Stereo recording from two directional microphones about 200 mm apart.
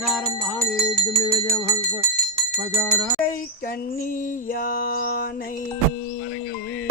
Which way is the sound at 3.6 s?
45° left (ahead or behind).